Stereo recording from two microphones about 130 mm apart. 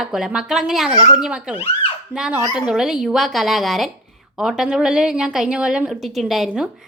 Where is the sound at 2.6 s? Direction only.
5° right (ahead or behind).